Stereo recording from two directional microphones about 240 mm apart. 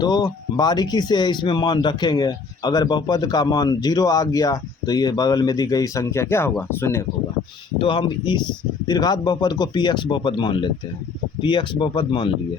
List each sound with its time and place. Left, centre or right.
0.0 s speech: centre
7.8 s speech: centre